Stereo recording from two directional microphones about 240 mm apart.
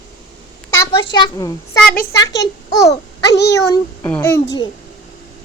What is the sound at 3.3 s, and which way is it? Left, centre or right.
Speech, left.